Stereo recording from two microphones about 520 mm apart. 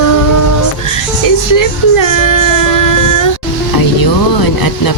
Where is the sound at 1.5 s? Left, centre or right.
Left.